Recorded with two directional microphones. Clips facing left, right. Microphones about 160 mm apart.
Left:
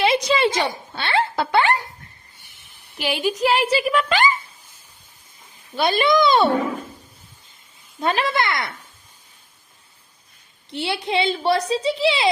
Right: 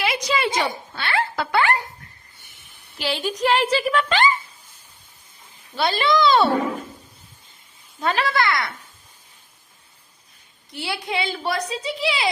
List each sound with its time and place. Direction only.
0.0 s a sound: 25° left (ahead or behind)
3.0 s a woman's voice: 10° left (ahead or behind)
5.7 s a woman's voice: 15° left (ahead or behind)
8.0 s a woman's voice: 20° left (ahead or behind)
10.7 s a woman's voice: 25° left (ahead or behind)